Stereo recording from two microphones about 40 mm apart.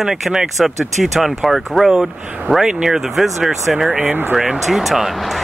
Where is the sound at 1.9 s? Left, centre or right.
Centre.